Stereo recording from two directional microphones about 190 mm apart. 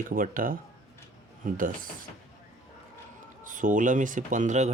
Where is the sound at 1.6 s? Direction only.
45° right (ahead or behind).